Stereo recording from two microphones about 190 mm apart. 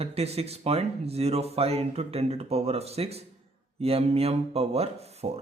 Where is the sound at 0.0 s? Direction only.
35° right (ahead or behind).